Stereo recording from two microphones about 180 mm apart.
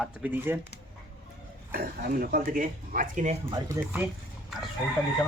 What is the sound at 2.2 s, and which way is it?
Speech, 50° right (ahead or behind).